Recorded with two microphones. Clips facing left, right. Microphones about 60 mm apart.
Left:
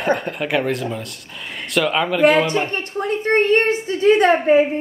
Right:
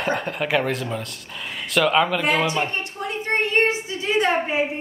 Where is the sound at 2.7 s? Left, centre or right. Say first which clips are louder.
Left 5 dB; left.